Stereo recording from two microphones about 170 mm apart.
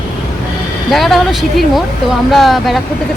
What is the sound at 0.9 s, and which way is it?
Speech, centre (ahead or behind).